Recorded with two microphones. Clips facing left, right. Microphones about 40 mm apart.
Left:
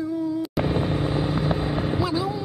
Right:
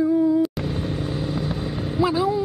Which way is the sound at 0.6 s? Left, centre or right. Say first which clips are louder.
Left 3 dB; left.